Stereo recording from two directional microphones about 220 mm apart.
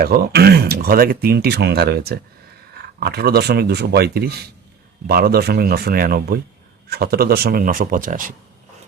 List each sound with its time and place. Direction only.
0.0 s speech: 45° right (ahead or behind)